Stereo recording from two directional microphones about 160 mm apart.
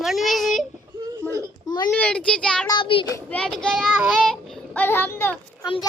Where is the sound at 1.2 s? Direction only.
15° left (ahead or behind).